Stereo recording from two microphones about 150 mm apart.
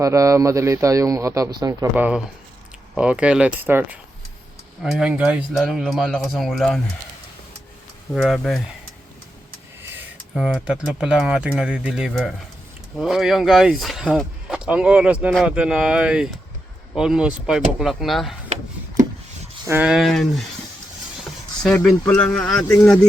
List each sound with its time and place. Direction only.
0.0 s speech: 20° right (ahead or behind)
2.0 s speech: 10° right (ahead or behind)
8.1 s speech: centre (ahead or behind)
9.8 s a sound: 15° right (ahead or behind)
10.3 s speech: 5° right (ahead or behind)
15.3 s speech: centre (ahead or behind)
18.4 s wood: 50° right (ahead or behind)
19.6 s speech: 10° right (ahead or behind)
22.0 s speech: 10° left (ahead or behind)